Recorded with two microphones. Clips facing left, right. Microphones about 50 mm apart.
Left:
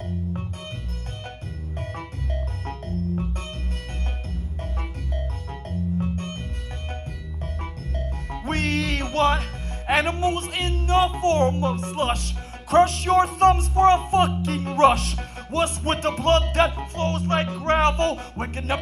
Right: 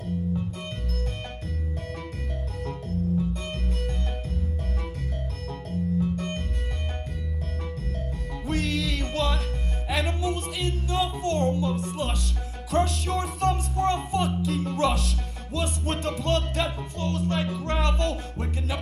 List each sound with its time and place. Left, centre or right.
0.0 s organ: left
5.7 s music: left
8.5 s music: left